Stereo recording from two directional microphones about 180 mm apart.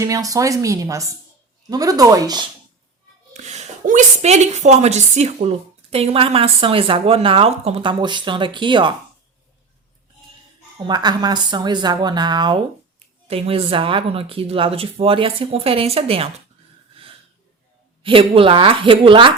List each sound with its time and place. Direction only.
0.0 s speech: 20° right (ahead or behind)
3.3 s a woman's voice: 40° right (ahead or behind)
10.8 s a woman's voice: 25° right (ahead or behind)
17.0 s wheeze: 30° right (ahead or behind)
18.0 s speech: 30° right (ahead or behind)